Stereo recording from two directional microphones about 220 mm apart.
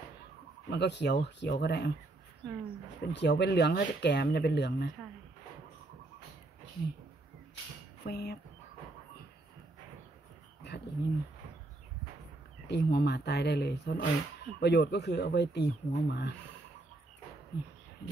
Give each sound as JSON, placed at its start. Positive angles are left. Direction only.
{"t": 0.7, "sound": "speech", "side_deg": 50}
{"t": 3.1, "sound": "speech", "side_deg": 50}
{"t": 8.0, "sound": "speech", "side_deg": 50}
{"t": 10.6, "sound": "speech", "side_deg": 50}
{"t": 12.6, "sound": "speech", "side_deg": 50}
{"t": 17.5, "sound": "speech", "side_deg": 50}